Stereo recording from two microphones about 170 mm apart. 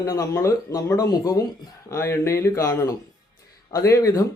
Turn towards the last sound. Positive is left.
turn(degrees=20)  # may be behind; listen again after turning